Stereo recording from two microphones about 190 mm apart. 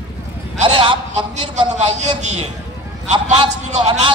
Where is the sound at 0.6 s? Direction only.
25° right (ahead or behind).